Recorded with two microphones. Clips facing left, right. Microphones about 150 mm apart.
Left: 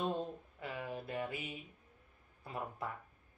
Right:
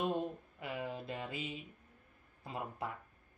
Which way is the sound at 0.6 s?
20° right (ahead or behind).